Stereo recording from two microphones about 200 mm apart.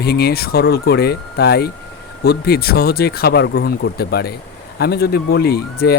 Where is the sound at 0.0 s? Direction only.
50° left (ahead or behind).